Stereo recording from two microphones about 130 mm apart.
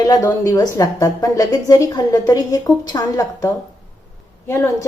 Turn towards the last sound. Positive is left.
turn(degrees=20)  # may be behind; listen again after turning